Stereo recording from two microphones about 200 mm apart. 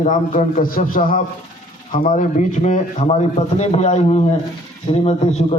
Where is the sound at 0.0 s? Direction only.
40° left (ahead or behind).